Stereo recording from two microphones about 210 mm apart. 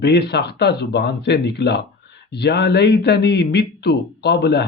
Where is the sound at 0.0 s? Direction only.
55° left (ahead or behind).